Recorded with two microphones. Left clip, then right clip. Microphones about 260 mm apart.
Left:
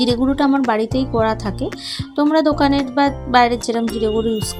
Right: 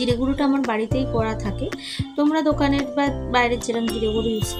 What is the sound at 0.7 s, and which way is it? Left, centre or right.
Music, centre.